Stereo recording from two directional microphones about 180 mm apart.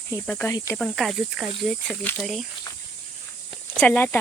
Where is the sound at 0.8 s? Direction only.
Centre (ahead or behind).